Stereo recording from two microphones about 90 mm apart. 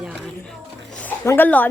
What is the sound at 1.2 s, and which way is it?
Speech, 30° left (ahead or behind).